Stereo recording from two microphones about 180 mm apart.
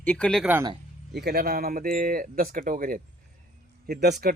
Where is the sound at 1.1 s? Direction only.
65° right (ahead or behind).